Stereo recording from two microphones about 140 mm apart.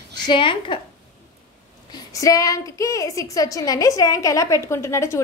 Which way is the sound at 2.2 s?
25° left (ahead or behind).